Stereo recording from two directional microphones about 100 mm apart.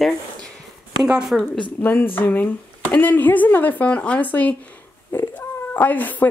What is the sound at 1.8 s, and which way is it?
Speech, 20° left (ahead or behind).